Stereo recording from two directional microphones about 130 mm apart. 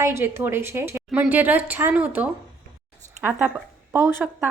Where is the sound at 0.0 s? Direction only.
20° right (ahead or behind).